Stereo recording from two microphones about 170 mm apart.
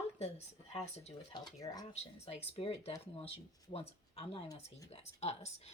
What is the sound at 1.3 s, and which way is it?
Speech, 25° left (ahead or behind).